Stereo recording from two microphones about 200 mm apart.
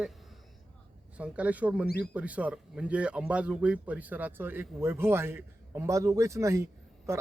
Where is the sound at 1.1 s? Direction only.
5° right (ahead or behind).